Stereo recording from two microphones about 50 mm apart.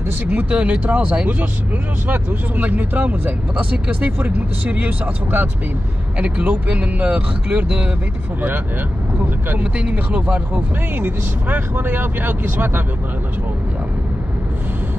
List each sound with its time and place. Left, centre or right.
0.3 s speech: right
6.1 s speech: right
9.2 s speech: right
11.0 s speech: right